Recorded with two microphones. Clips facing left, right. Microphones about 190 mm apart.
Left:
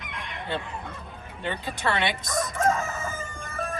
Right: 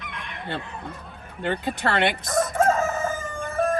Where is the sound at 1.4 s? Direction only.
55° right (ahead or behind).